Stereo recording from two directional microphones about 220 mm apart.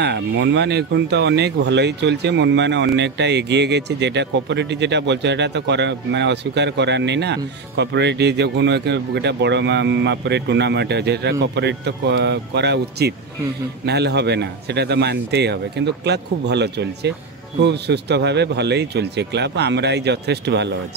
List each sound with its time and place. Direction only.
0.0 s speech: 50° right (ahead or behind)